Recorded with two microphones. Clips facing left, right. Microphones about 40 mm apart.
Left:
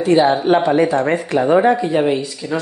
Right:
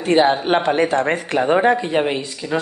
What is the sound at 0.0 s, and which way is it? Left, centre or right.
Speech, right.